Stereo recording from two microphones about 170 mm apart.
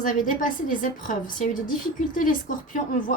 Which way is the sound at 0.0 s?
50° left (ahead or behind).